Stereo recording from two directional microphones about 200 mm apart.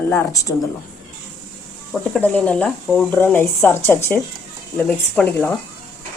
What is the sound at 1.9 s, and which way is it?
Speech, centre (ahead or behind).